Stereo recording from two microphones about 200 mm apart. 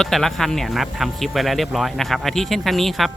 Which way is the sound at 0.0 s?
Centre (ahead or behind).